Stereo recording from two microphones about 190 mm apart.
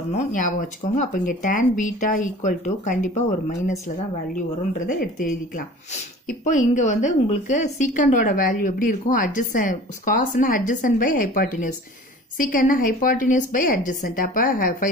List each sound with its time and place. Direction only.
0.1 s speech: 40° left (ahead or behind)
4.7 s a woman's voice: 45° left (ahead or behind)